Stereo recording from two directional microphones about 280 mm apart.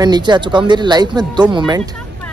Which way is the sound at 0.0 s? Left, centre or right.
Centre.